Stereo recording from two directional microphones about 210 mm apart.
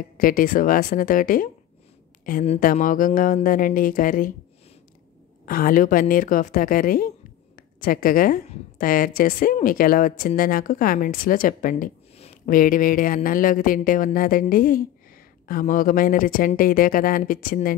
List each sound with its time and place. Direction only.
0.2 s a woman's voice: 40° left (ahead or behind)
5.4 s a woman's voice: 40° left (ahead or behind)